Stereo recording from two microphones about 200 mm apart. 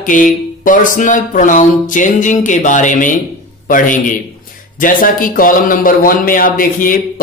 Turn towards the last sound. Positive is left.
turn(degrees=45)  # may be behind; listen again after turning